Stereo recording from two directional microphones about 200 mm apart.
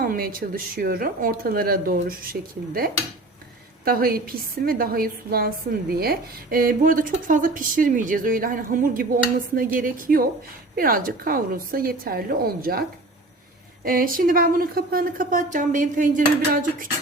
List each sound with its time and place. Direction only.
0.0 s speech: 45° right (ahead or behind)
13.8 s speech: 45° right (ahead or behind)